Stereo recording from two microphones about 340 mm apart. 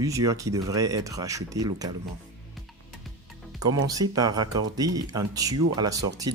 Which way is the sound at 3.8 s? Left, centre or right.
Centre.